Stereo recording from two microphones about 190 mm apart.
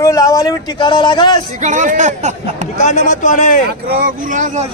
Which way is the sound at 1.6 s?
40° right (ahead or behind).